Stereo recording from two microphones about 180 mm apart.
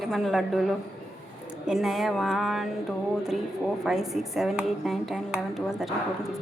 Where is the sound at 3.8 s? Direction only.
Centre (ahead or behind).